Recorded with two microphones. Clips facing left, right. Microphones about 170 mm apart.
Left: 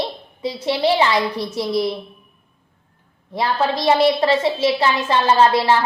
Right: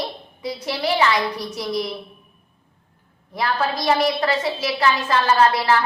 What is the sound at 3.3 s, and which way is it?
A woman's voice, 25° left (ahead or behind).